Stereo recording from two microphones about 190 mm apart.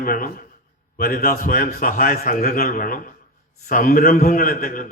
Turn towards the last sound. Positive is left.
turn(degrees=45)  # may be behind; listen again after turning